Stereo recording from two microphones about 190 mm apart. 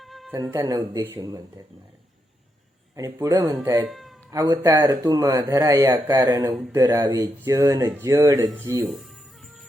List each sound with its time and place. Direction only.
0.0 s music: centre (ahead or behind)
0.5 s speech: 15° right (ahead or behind)
2.9 s speech: 15° right (ahead or behind)
3.8 s speech: centre (ahead or behind)
4.3 s speech: 20° right (ahead or behind)
8.9 s music: centre (ahead or behind)